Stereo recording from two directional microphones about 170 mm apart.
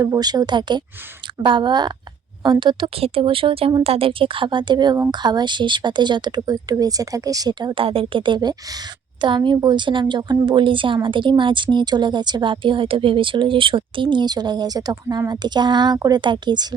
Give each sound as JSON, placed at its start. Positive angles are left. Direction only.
{"t": 0.0, "sound": "a woman's voice", "side_deg": -20}